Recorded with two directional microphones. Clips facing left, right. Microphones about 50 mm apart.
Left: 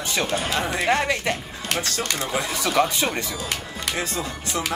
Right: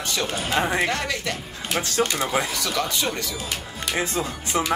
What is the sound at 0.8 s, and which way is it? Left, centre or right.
Speech, left.